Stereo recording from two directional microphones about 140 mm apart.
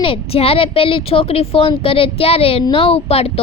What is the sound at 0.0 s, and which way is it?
A child's voice, 40° left (ahead or behind).